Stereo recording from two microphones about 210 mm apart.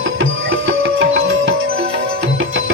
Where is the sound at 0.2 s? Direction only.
70° right (ahead or behind).